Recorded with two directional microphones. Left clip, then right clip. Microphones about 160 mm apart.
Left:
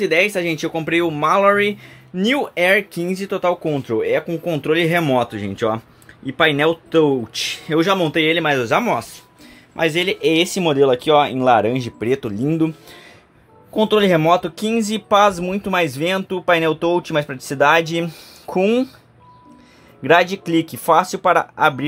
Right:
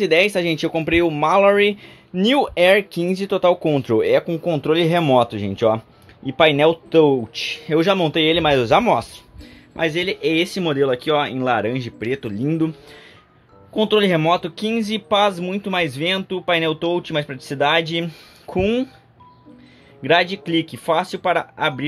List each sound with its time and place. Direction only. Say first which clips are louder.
0.0 s speech: even; 15° right (ahead or behind)
4.3 s speech: even; 10° right (ahead or behind)
7.3 s speech: left 2 dB; 10° left (ahead or behind)
7.6 s speech: even; 5° right (ahead or behind)
9.8 s speech: left 3 dB; 10° left (ahead or behind)
20.0 s speech: left 3 dB; 5° left (ahead or behind)